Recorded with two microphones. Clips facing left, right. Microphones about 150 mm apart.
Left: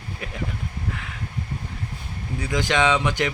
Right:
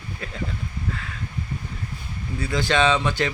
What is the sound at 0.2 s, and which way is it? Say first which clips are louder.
Speech: left 1 dB; 15° left (ahead or behind).